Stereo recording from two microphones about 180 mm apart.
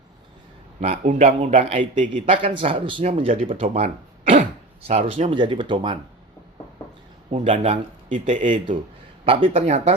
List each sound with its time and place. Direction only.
0.8 s speech: 40° right (ahead or behind)
2.3 s speech: 30° right (ahead or behind)
7.3 s speech: 30° right (ahead or behind)